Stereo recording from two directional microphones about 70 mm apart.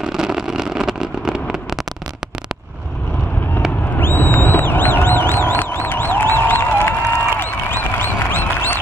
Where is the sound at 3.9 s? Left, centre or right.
Left.